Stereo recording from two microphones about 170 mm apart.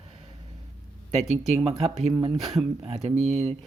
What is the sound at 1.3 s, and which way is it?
Speech, 35° right (ahead or behind).